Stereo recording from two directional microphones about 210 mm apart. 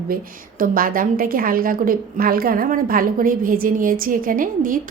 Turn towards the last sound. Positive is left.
turn(degrees=-40)  # may be behind; listen again after turning